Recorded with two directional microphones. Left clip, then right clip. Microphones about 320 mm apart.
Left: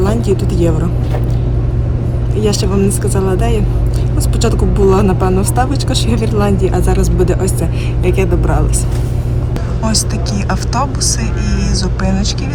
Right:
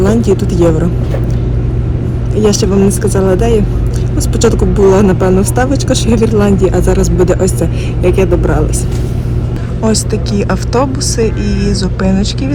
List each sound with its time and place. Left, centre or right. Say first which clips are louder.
0.0 s a woman's voice: right 4 dB; centre
2.4 s speech: right 5 dB; centre
9.8 s speech: right 4 dB; centre